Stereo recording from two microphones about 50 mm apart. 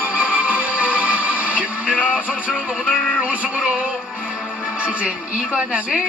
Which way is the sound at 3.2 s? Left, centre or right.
Right.